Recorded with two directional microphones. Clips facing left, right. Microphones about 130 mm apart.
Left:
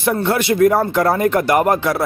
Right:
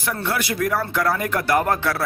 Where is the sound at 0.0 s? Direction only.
25° left (ahead or behind).